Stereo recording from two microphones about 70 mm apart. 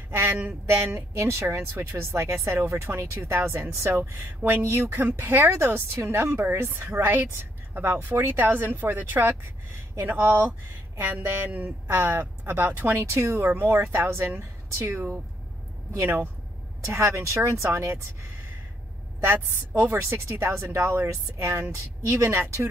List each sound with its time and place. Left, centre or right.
0.1 s a sound: right
0.7 s a woman's voice: right
4.6 s a woman's voice: right